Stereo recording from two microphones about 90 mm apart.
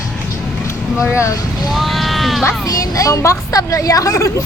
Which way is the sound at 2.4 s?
40° left (ahead or behind).